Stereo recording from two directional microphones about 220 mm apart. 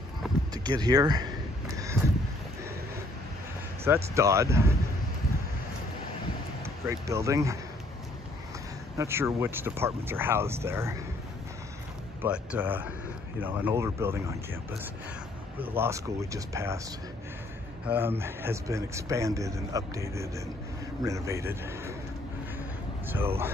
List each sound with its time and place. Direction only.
0.7 s a man's voice: 15° right (ahead or behind)
3.8 s a man's voice: 10° right (ahead or behind)
6.6 s speech: 15° right (ahead or behind)
8.9 s a man's voice: 10° right (ahead or behind)
12.2 s a man's voice: 5° right (ahead or behind)
15.6 s a man's voice: 10° right (ahead or behind)
17.8 s a man's voice: 10° right (ahead or behind)
23.0 s a man's voice: 10° right (ahead or behind)